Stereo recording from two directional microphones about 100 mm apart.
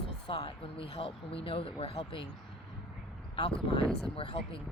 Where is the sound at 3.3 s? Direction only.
60° left (ahead or behind).